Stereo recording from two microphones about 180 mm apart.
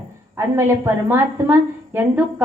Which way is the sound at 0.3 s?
15° right (ahead or behind).